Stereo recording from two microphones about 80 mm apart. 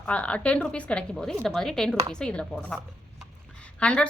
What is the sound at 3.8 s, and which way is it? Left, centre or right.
Speech, centre.